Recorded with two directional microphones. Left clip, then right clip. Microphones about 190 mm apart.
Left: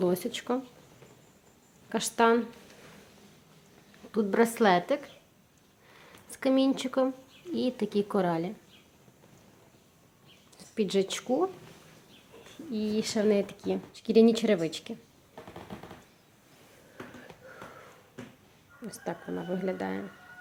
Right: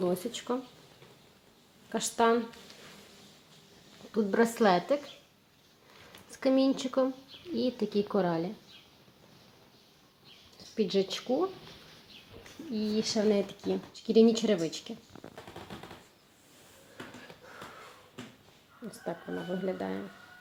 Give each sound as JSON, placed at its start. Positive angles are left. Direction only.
{"t": 0.0, "sound": "speech", "side_deg": 15}
{"t": 1.9, "sound": "speech", "side_deg": 15}
{"t": 4.1, "sound": "speech", "side_deg": 5}
{"t": 6.3, "sound": "speech", "side_deg": 0}
{"t": 10.8, "sound": "speech", "side_deg": 5}
{"t": 12.7, "sound": "speech", "side_deg": 0}
{"t": 19.0, "sound": "speech", "side_deg": 5}